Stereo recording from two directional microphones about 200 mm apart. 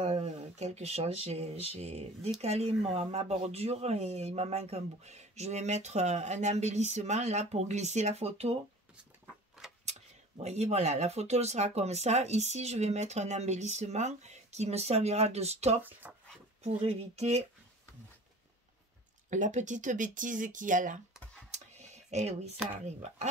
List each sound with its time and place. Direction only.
0.0 s speech: 35° right (ahead or behind)
9.8 s speech: 35° right (ahead or behind)
15.8 s speech: 10° right (ahead or behind)
16.6 s speech: 35° right (ahead or behind)
19.3 s speech: 40° right (ahead or behind)
21.5 s a sound: 35° right (ahead or behind)
22.8 s speech: 35° right (ahead or behind)